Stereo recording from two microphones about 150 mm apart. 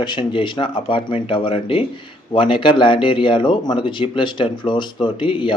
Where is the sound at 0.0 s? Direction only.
30° left (ahead or behind).